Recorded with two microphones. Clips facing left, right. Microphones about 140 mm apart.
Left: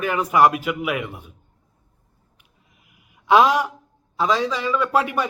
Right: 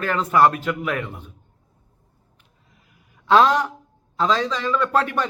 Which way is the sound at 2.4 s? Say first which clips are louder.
Right 1 dB; 15° left (ahead or behind).